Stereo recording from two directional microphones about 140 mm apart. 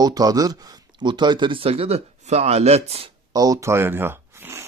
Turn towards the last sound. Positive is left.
turn(degrees=-15)  # may be behind; listen again after turning